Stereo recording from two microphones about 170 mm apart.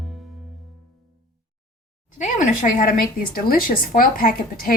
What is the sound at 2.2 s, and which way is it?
Speech, 50° left (ahead or behind).